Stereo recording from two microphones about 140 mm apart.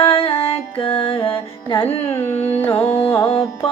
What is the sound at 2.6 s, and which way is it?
Carnatic music, 15° left (ahead or behind).